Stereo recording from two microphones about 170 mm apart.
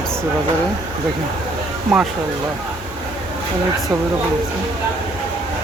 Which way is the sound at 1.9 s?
Centre (ahead or behind).